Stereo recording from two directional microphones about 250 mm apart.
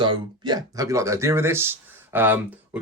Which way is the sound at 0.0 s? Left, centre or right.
Centre.